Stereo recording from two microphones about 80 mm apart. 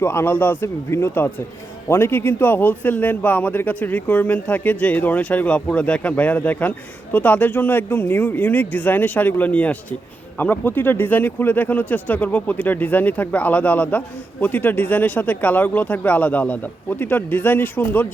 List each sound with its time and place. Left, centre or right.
0.0 s speech: left